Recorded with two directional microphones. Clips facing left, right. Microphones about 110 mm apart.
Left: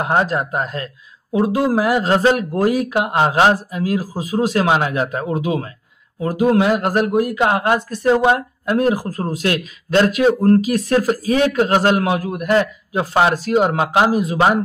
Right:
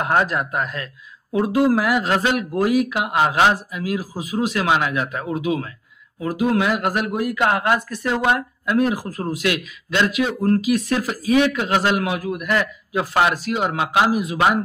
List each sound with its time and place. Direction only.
0.0 s speech: 25° left (ahead or behind)
7.4 s speech: 25° left (ahead or behind)